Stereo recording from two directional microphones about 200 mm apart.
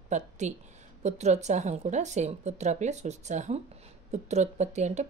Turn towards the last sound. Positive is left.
turn(degrees=-35)  # may be behind; listen again after turning